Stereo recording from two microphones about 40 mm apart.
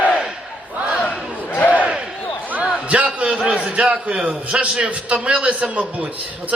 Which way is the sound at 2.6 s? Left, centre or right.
Right.